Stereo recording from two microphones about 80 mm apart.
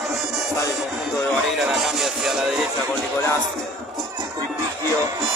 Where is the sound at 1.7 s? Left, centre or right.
Centre.